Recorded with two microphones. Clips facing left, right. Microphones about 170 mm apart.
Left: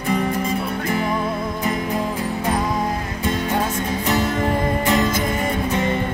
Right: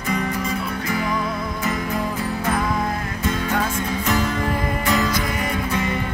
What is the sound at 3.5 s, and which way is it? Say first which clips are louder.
Music: left 1 dB; 20° left (ahead or behind).